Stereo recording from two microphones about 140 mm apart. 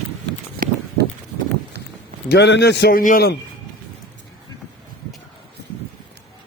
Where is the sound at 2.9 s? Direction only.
90° left.